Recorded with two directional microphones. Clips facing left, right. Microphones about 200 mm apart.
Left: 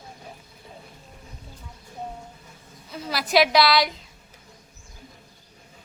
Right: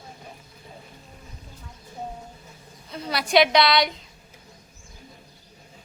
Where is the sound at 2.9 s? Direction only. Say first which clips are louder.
Right 1 dB; centre (ahead or behind).